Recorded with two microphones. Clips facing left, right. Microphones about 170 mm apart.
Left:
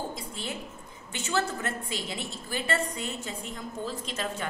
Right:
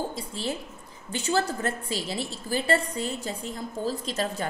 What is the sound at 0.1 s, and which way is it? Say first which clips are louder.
A woman's voice: right 5 dB; 30° right (ahead or behind).